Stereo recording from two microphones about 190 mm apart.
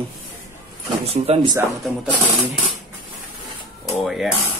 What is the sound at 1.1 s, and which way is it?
Speech, 30° right (ahead or behind).